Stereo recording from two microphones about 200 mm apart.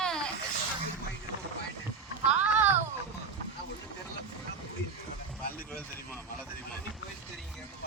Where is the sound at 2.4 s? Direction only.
10° right (ahead or behind).